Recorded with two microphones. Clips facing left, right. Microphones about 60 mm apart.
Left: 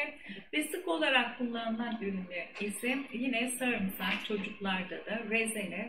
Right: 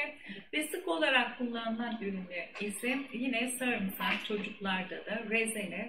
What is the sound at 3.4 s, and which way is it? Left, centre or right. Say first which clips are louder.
Speech: left 1 dB; centre.